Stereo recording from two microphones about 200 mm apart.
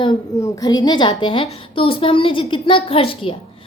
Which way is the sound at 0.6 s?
20° left (ahead or behind).